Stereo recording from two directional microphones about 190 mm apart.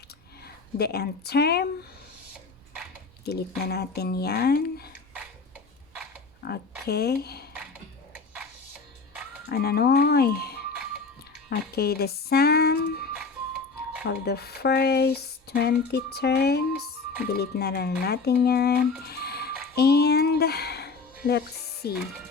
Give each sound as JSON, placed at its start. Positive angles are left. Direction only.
{"t": 0.4, "sound": "speech", "side_deg": 55}
{"t": 3.2, "sound": "speech", "side_deg": 55}
{"t": 6.4, "sound": "speech", "side_deg": 55}
{"t": 9.5, "sound": "speech", "side_deg": 55}
{"t": 14.1, "sound": "speech", "side_deg": 55}